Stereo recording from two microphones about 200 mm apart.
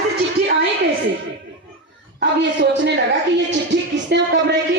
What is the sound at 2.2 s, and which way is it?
A woman's voice, 65° right (ahead or behind).